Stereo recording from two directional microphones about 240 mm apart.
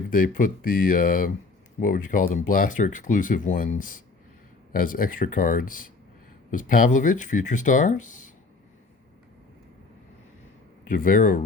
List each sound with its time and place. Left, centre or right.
0.1 s speech: left
10.8 s speech: left